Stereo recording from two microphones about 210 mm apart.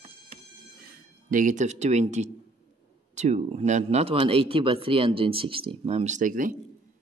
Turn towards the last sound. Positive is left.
turn(degrees=-40)  # may be behind; listen again after turning